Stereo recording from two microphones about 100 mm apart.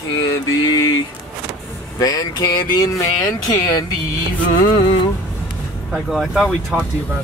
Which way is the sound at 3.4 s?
40° left (ahead or behind).